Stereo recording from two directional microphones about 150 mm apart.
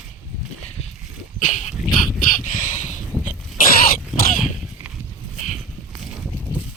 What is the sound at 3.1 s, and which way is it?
Vehicle, 5° left (ahead or behind).